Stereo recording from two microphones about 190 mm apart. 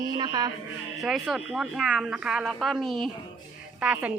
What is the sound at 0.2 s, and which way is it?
Speech, 20° right (ahead or behind).